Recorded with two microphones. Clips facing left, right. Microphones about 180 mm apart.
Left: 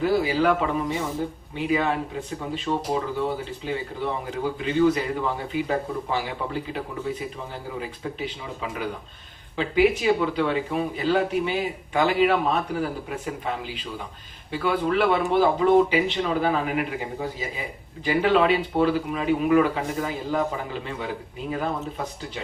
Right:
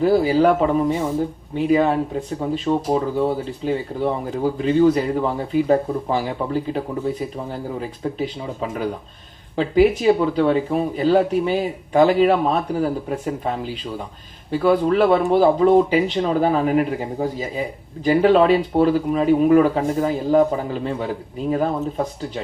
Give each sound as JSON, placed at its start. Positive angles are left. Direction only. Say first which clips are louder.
{"t": 0.0, "sound": "speech", "louder": "right 6 dB", "side_deg": -40}
{"t": 9.6, "sound": "speech", "louder": "right 5 dB", "side_deg": -40}